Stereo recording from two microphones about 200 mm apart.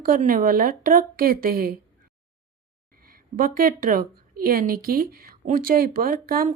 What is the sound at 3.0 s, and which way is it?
Speech, 45° right (ahead or behind).